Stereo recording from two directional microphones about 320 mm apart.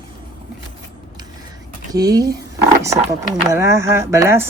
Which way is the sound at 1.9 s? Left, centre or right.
Centre.